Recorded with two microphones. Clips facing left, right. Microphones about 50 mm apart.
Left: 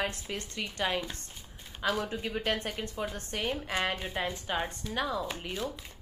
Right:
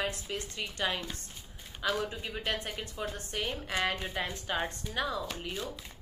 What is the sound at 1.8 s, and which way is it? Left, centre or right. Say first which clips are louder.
Speech: left 1 dB; centre.